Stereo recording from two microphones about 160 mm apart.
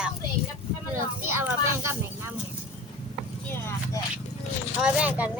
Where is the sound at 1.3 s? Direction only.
15° right (ahead or behind).